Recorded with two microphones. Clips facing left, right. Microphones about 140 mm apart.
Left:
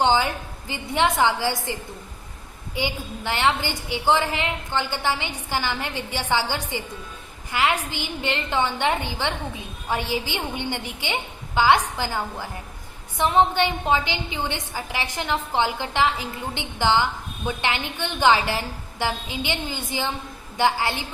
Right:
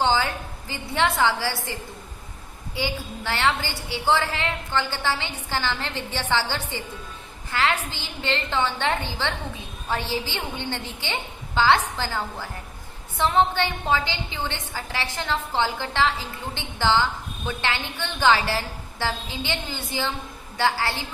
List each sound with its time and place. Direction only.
0.0 s a sound: 20° left (ahead or behind)
0.7 s a woman's voice: 15° left (ahead or behind)
2.7 s a woman's voice: 15° left (ahead or behind)